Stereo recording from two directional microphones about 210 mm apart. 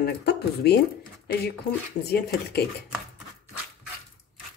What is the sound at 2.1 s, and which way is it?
Speech, 50° left (ahead or behind).